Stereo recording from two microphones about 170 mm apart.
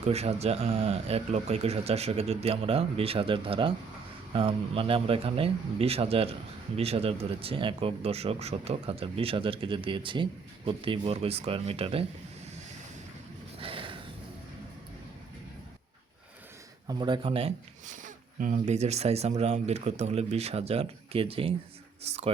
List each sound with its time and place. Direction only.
0.0 s speech: 40° right (ahead or behind)
13.6 s a sound: 30° right (ahead or behind)
16.8 s speech: 25° right (ahead or behind)
17.8 s speech: 50° right (ahead or behind)